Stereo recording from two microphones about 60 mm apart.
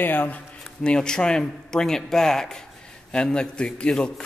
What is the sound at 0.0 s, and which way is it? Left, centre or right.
Speech, left.